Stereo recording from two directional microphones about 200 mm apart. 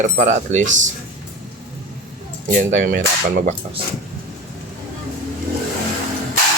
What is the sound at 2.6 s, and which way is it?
Speech, 40° right (ahead or behind).